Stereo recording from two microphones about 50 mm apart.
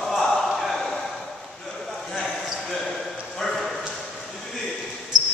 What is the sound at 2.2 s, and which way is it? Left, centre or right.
Basketball bounce, centre.